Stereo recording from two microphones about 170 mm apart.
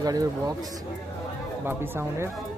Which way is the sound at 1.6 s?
15° right (ahead or behind).